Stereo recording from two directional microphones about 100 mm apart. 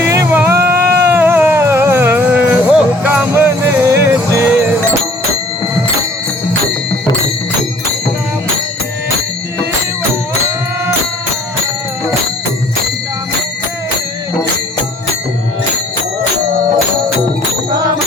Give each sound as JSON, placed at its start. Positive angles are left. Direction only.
{"t": 0.0, "sound": "music", "side_deg": -30}